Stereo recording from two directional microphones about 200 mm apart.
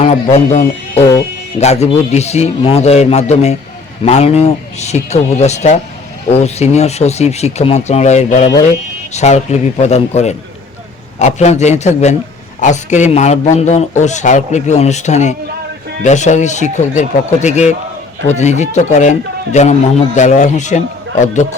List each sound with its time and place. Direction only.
0.0 s a man's voice: 30° left (ahead or behind)